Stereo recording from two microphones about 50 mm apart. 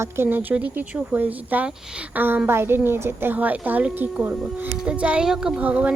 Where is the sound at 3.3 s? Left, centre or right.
Right.